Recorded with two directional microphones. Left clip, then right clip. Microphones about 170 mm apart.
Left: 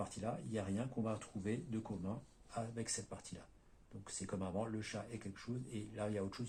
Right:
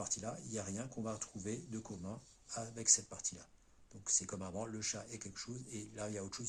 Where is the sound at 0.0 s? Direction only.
35° right (ahead or behind).